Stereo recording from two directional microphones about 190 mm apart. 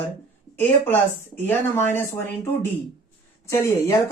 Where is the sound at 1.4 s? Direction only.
10° left (ahead or behind).